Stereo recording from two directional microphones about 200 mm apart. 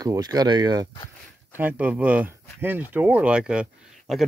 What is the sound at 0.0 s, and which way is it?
Speech, 20° right (ahead or behind).